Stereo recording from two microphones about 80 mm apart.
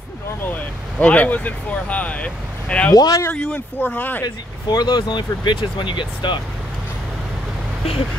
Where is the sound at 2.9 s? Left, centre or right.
Left.